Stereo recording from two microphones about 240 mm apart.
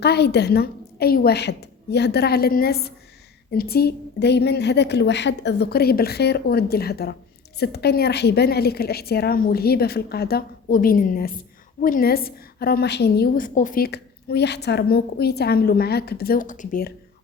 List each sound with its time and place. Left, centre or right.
0.0 s a woman's voice: left